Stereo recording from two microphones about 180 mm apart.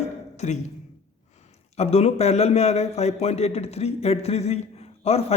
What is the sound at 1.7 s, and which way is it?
A man's voice, 35° left (ahead or behind).